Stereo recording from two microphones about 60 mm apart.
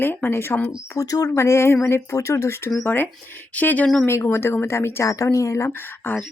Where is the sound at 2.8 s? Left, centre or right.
Left.